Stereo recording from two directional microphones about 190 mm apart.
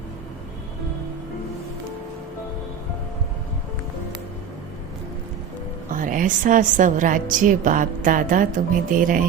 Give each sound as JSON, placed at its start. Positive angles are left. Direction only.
{"t": 5.9, "sound": "a woman's voice", "side_deg": -45}